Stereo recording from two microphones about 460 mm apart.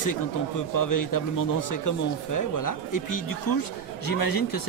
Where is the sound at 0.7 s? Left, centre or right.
Left.